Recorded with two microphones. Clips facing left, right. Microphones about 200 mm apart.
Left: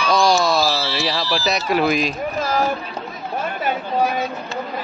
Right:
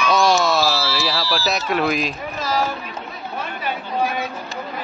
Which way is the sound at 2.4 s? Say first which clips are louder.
Left 1 dB; 55° left (ahead or behind).